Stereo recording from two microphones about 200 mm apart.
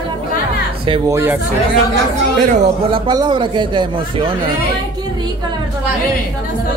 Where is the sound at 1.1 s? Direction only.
10° right (ahead or behind).